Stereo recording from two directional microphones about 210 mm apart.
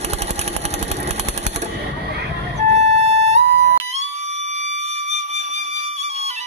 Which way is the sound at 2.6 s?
30° right (ahead or behind).